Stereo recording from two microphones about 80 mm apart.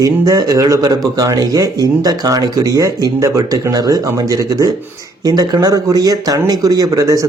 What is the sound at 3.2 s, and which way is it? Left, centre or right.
Speech, right.